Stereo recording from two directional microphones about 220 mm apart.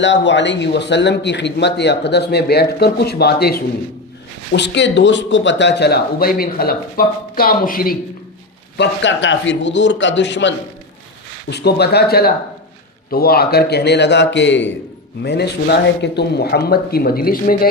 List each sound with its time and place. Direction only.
0.0 s speech: 55° left (ahead or behind)
8.8 s a man's voice: 55° left (ahead or behind)